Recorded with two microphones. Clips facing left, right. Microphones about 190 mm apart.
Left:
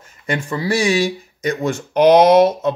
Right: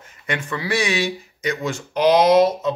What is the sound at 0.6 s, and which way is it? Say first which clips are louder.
Speech: left 5 dB; 45° left (ahead or behind).